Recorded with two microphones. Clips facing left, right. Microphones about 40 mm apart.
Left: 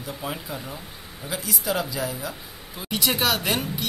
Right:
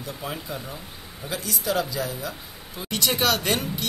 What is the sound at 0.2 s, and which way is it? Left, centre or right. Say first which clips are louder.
Speech: even; centre.